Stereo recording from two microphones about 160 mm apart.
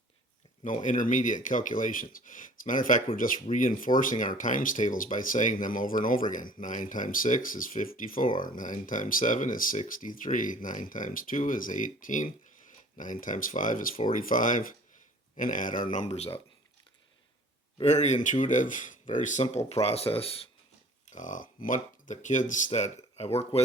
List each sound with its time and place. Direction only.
0.6 s speech: 55° left (ahead or behind)
17.8 s speech: 45° left (ahead or behind)
21.1 s speech: 50° left (ahead or behind)